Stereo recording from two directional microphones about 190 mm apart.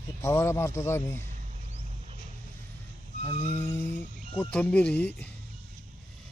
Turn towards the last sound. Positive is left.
turn(degrees=10)  # may be behind; listen again after turning